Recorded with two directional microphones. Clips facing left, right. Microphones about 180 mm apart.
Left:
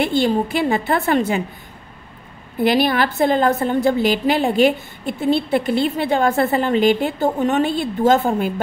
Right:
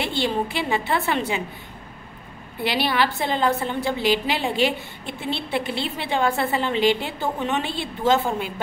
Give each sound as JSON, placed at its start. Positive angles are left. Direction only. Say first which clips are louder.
{"t": 0.0, "sound": "a woman's voice", "louder": "left 6 dB", "side_deg": 45}
{"t": 2.6, "sound": "a woman's voice", "louder": "left 6 dB", "side_deg": 45}